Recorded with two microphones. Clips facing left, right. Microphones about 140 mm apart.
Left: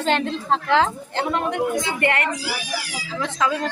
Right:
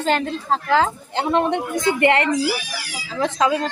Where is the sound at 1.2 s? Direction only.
20° right (ahead or behind).